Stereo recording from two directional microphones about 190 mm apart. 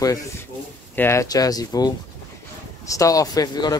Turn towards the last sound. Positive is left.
turn(degrees=20)  # may be behind; listen again after turning